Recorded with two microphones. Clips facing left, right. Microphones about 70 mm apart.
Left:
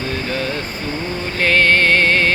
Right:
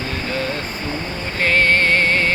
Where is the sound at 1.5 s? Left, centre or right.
Left.